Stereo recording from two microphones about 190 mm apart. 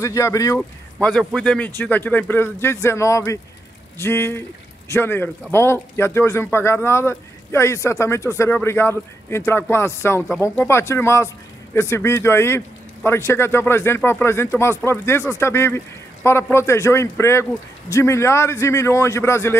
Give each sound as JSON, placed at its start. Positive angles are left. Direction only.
{"t": 0.0, "sound": "a man's voice", "side_deg": 15}
{"t": 0.6, "sound": "a man's voice", "side_deg": 5}